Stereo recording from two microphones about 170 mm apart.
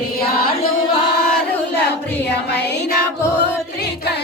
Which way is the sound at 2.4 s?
75° left (ahead or behind).